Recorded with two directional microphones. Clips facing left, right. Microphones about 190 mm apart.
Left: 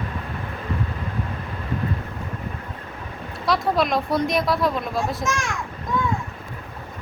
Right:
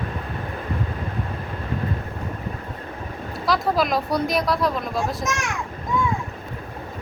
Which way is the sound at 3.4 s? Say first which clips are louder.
Even; centre (ahead or behind).